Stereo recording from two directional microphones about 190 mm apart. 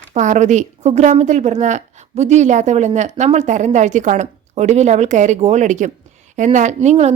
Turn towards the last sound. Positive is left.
turn(degrees=-35)  # may be behind; listen again after turning